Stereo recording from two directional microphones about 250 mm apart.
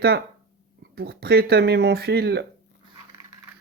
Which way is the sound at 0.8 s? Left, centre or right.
Right.